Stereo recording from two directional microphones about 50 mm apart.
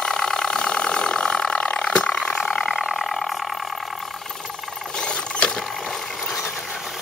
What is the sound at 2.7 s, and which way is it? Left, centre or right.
Vehicle, centre.